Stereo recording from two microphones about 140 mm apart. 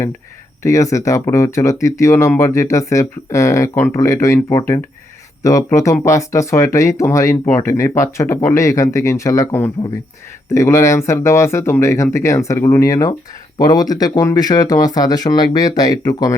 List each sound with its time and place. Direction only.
0.6 s speech: 20° left (ahead or behind)